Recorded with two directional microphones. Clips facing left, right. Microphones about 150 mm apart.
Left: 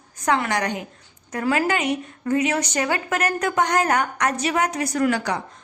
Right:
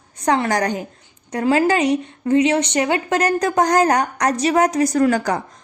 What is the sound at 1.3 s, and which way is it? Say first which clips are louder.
Speech: right 5 dB; 30° right (ahead or behind).